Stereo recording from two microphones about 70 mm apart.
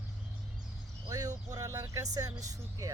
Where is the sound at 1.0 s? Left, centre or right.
Right.